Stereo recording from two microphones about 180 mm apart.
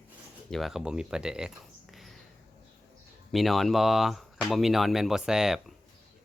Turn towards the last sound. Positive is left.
turn(degrees=-5)  # may be behind; listen again after turning